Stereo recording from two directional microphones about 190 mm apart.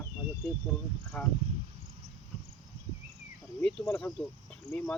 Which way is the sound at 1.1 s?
10° left (ahead or behind).